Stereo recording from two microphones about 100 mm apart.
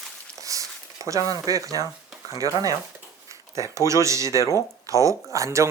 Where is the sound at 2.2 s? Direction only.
35° right (ahead or behind).